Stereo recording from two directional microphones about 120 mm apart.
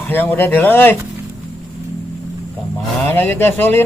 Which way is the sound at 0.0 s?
15° left (ahead or behind).